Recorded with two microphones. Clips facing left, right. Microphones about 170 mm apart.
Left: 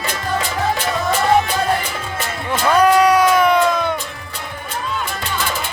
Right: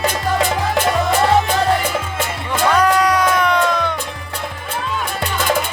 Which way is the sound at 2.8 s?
10° left (ahead or behind).